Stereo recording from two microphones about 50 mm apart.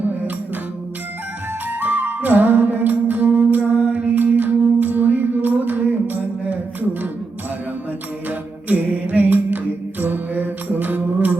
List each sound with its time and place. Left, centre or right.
1.8 s music: right
8.3 s music: right